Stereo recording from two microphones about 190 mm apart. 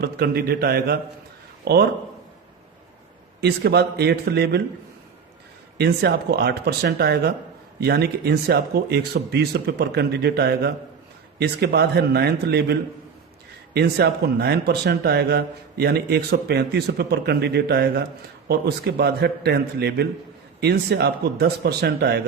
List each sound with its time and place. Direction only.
0.0 s a man's voice: 55° right (ahead or behind)
3.4 s speech: 60° right (ahead or behind)
5.7 s speech: 60° right (ahead or behind)